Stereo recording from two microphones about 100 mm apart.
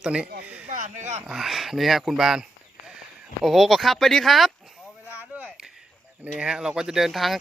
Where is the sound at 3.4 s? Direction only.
5° right (ahead or behind).